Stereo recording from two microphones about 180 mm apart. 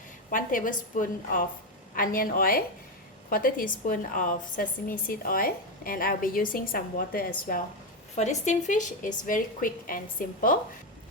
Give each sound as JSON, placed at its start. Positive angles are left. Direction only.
{"t": 0.3, "sound": "a woman's voice", "side_deg": 50}
{"t": 8.1, "sound": "a woman's voice", "side_deg": 40}